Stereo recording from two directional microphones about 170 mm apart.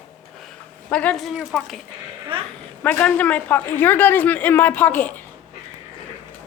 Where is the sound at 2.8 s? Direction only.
10° left (ahead or behind).